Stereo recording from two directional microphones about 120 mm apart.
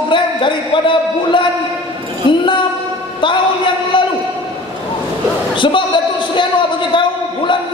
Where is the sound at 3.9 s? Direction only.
45° left (ahead or behind).